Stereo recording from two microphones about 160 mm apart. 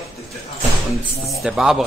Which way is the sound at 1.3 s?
Centre (ahead or behind).